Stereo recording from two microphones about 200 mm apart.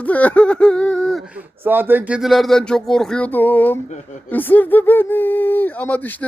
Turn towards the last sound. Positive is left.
turn(degrees=10)  # may be behind; listen again after turning